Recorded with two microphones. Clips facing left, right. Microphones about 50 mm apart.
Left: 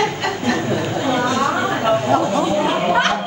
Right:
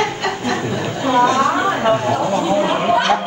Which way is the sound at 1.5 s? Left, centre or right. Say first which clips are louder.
Right 2 dB; centre.